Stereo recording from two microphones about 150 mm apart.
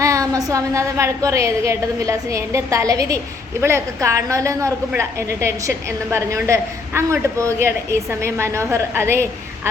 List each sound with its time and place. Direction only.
0.0 s a woman's voice: 20° right (ahead or behind)